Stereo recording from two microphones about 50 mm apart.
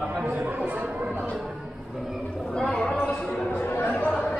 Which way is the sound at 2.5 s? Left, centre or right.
Centre.